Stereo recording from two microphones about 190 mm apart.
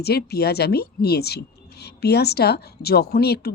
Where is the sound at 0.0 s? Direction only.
55° left (ahead or behind).